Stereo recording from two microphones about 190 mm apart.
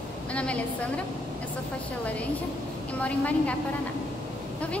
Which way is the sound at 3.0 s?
5° left (ahead or behind).